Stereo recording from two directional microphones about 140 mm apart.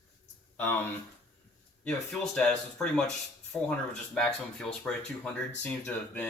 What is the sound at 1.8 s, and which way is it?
Speech, 5° left (ahead or behind).